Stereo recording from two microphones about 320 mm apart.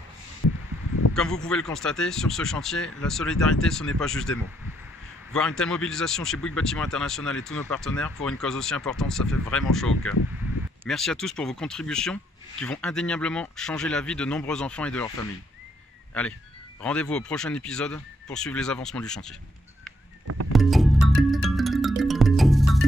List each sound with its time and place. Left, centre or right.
1.1 s speech: centre
16.1 s speech: centre
20.5 s music: centre